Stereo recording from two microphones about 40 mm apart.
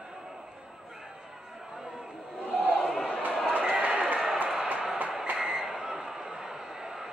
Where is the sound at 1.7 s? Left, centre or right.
Centre.